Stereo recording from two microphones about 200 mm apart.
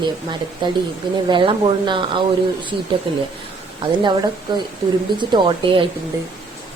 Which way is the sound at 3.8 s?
25° right (ahead or behind).